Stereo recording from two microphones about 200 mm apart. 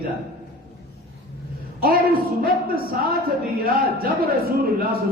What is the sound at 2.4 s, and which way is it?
A man's voice, 50° right (ahead or behind).